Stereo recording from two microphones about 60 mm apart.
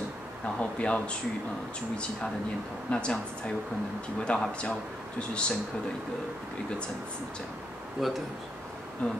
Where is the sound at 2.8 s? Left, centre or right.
Centre.